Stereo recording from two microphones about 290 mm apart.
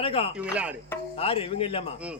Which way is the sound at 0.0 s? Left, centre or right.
Centre.